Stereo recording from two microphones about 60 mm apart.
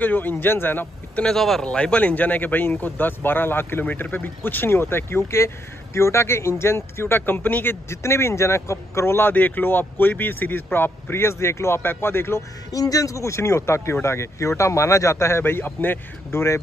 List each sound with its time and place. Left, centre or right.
0.0 s speech: left
1.2 s speech: centre
1.6 s speech: centre
7.9 s speech: left
9.3 s speech: left
12.7 s speech: left
16.3 s speech: left